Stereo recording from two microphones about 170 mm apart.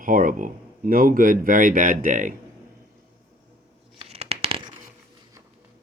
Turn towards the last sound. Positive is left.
turn(degrees=-30)  # may be behind; listen again after turning